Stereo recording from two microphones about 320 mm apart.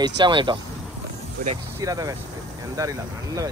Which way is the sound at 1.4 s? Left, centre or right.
Right.